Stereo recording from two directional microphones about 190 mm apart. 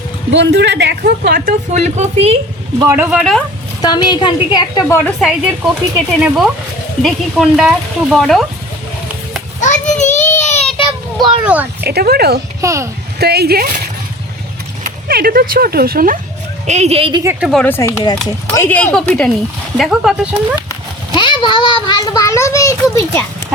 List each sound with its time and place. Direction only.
0.3 s a woman's voice: 65° right (ahead or behind); by 2.3 s 35° right (ahead or behind)
2.7 s speech: 15° right (ahead or behind)
3.8 s a woman's voice: 20° left (ahead or behind)
5.2 s speech: 5° right (ahead or behind)
9.6 s a sound: 40° left (ahead or behind)
10.4 s child singing: 35° left (ahead or behind)
11.2 s speech: 5° right (ahead or behind)
11.8 s a woman's voice: 55° right (ahead or behind)
12.6 s speech: 15° right (ahead or behind)
13.1 s a woman's voice: 55° right (ahead or behind)
14.8 s speech: 50° right (ahead or behind)
16.6 s speech: 35° right (ahead or behind)
17.4 s a woman's voice: 5° left (ahead or behind)
21.1 s a child's voice: 25° left (ahead or behind)